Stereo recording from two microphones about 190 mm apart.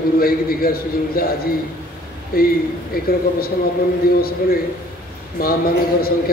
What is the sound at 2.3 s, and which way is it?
A man's voice, 50° left (ahead or behind).